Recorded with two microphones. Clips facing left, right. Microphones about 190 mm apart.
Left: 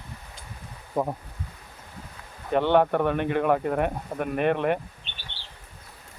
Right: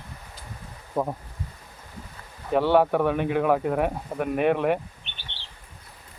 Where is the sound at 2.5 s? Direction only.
5° right (ahead or behind).